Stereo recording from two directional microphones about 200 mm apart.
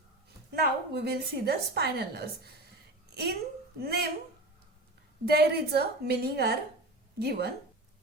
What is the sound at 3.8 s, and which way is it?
Speech, 50° right (ahead or behind).